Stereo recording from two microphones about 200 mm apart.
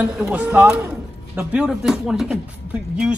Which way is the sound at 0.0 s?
5° right (ahead or behind).